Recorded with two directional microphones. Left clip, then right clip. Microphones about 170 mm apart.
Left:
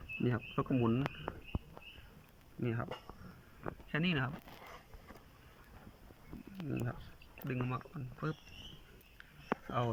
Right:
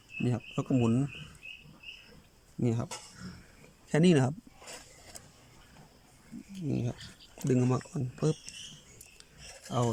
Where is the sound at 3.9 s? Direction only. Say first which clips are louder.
Right 10 dB; 40° right (ahead or behind).